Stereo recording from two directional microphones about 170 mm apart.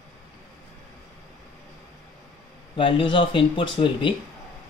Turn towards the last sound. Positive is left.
turn(degrees=30)  # may be behind; listen again after turning